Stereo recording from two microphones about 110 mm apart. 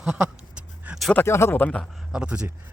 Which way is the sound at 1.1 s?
20° left (ahead or behind).